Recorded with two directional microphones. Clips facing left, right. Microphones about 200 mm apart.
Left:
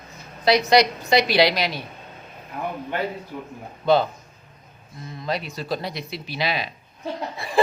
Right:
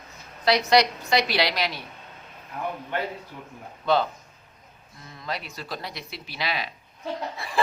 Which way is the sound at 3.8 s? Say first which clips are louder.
Left 4 dB; 15° left (ahead or behind).